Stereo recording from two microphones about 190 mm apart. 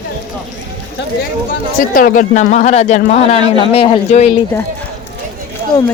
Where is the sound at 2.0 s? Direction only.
45° left (ahead or behind).